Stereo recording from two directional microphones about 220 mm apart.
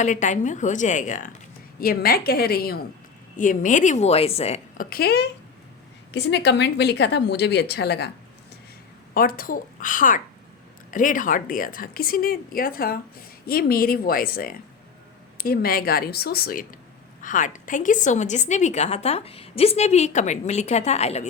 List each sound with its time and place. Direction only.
0.0 s a woman's voice: 35° left (ahead or behind)
4.9 s a woman's voice: 45° left (ahead or behind)
9.1 s a woman's voice: 40° left (ahead or behind)